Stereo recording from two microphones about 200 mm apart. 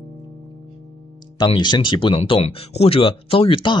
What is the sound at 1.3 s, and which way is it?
Speech, 25° left (ahead or behind).